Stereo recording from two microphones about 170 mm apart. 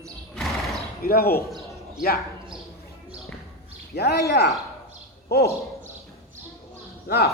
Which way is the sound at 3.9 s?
70° left (ahead or behind).